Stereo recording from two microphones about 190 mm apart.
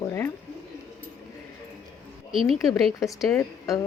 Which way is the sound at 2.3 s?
Centre (ahead or behind).